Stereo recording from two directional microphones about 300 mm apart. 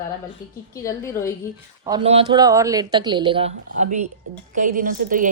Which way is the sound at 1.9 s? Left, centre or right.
Centre.